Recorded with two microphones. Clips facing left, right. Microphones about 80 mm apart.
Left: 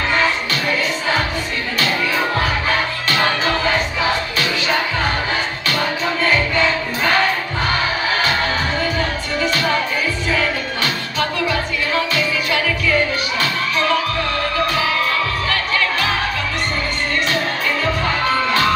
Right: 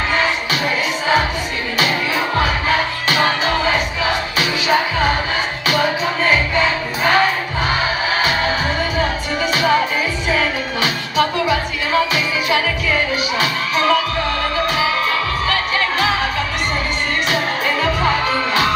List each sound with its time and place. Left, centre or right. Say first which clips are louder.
6.2 s music: even; centre
8.9 s music: right 2 dB; centre
15.5 s music: right 1 dB; centre
18.2 s music: even; centre